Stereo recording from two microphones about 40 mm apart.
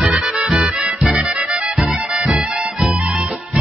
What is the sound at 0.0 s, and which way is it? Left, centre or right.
Music, right.